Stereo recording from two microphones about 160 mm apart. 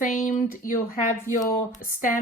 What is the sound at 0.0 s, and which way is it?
A woman's voice, 60° left (ahead or behind).